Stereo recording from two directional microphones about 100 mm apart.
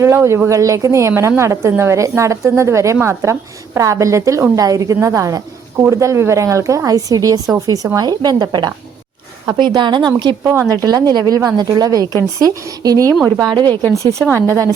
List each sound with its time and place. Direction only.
0.0 s a woman's voice: 25° right (ahead or behind); by 10.3 s 45° right (ahead or behind)
10.4 s a woman's voice: 30° right (ahead or behind); by 13.7 s 45° right (ahead or behind)
13.9 s a woman's voice: 30° right (ahead or behind)